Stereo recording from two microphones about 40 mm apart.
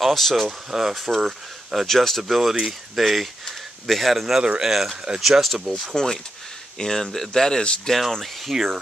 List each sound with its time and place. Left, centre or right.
0.0 s speech: centre
0.5 s speech: centre
0.9 s speech: centre
1.9 s speech: centre
4.4 s speech: centre
4.6 s speech: centre
6.0 s speech: centre
8.5 s speech: centre